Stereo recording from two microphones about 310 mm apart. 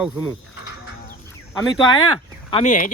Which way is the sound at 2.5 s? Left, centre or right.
Left.